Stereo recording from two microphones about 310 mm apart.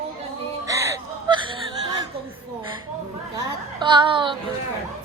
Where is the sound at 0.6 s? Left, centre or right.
Centre.